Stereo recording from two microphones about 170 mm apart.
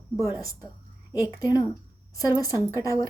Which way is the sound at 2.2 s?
20° left (ahead or behind).